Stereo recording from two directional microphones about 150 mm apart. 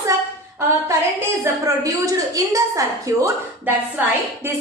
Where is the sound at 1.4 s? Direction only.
20° right (ahead or behind).